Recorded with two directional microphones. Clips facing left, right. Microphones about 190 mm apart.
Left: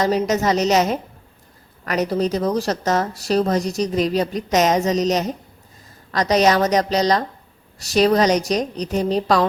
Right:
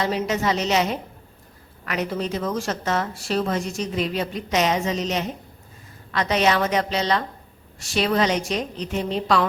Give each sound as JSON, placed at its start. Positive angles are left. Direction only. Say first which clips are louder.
{"t": 0.0, "sound": "a woman's voice", "louder": "left 5 dB", "side_deg": 40}